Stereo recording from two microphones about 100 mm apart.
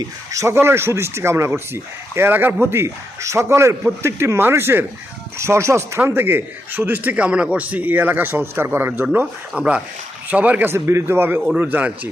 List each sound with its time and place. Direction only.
0.0 s speech: 35° right (ahead or behind)
9.6 s speech: 10° right (ahead or behind)